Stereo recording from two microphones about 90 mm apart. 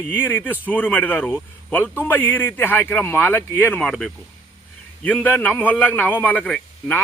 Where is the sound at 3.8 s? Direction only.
5° left (ahead or behind).